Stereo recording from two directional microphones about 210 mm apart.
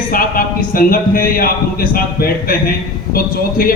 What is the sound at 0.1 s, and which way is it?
A man's voice, 45° left (ahead or behind).